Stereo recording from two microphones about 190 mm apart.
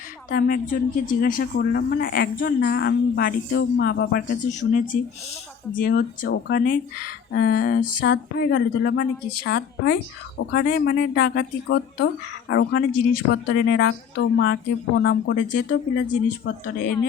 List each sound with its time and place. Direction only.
0.3 s speech: 50° left (ahead or behind); by 12.8 s 75° left (ahead or behind)
13.3 s speech: 60° left (ahead or behind)